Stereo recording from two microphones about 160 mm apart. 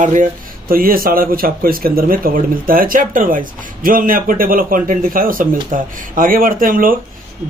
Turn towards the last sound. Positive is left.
turn(degrees=-60)  # may be behind; listen again after turning